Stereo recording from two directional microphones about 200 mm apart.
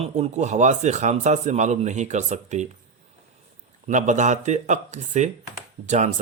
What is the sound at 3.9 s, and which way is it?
Speech, 35° right (ahead or behind).